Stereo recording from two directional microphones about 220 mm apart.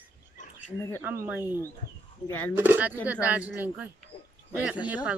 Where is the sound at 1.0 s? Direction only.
10° right (ahead or behind).